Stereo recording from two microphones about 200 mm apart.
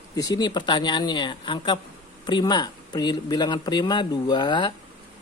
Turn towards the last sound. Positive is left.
turn(degrees=20)  # may be behind; listen again after turning